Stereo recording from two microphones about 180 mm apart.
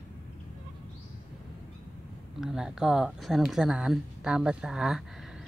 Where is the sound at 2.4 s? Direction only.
5° right (ahead or behind).